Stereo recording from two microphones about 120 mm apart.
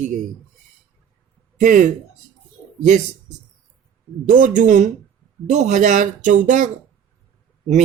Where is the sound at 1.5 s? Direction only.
90° right.